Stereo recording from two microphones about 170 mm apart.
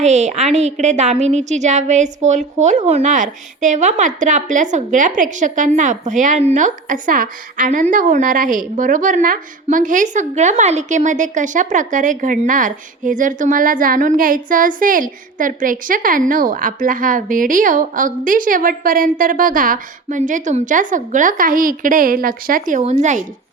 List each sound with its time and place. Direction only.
0.0 s a woman's voice: 40° right (ahead or behind)